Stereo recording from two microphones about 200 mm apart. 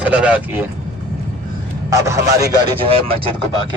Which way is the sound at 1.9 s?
15° right (ahead or behind).